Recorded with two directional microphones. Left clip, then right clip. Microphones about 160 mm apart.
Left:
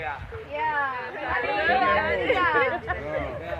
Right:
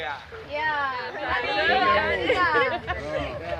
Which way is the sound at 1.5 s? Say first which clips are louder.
Right 1 dB; 5° left (ahead or behind).